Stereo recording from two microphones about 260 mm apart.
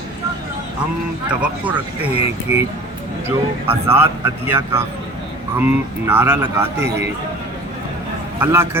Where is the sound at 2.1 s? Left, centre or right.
Left.